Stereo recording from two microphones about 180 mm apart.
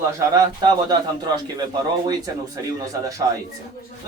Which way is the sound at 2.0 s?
20° right (ahead or behind).